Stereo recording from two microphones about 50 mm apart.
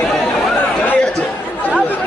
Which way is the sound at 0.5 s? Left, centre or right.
Left.